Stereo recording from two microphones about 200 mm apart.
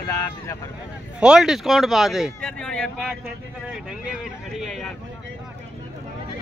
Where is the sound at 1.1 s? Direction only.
5° right (ahead or behind).